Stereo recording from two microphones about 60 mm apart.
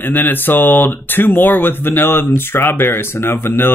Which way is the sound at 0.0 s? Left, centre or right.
Left.